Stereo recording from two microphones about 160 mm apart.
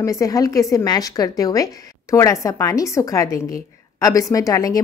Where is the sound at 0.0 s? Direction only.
20° left (ahead or behind).